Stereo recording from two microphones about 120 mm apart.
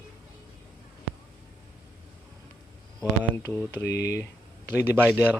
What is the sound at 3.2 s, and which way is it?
Speech, 15° left (ahead or behind).